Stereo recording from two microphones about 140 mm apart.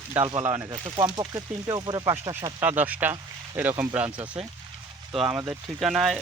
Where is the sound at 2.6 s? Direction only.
15° right (ahead or behind).